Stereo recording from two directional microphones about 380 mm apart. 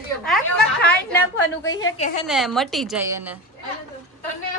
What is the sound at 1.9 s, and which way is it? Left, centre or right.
Speech, centre.